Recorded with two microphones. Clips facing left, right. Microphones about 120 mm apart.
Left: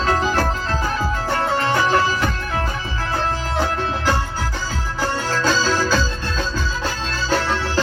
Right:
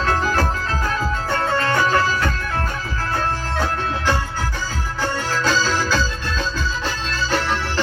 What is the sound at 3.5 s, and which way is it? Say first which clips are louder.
Music: left 1 dB; 15° left (ahead or behind).